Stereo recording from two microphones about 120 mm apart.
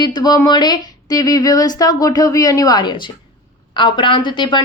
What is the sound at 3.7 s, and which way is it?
Speech, 45° left (ahead or behind).